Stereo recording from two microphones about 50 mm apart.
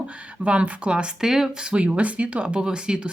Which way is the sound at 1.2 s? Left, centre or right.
Centre.